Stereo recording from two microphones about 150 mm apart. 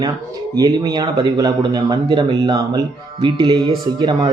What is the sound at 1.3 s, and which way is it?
A man's voice, 25° right (ahead or behind).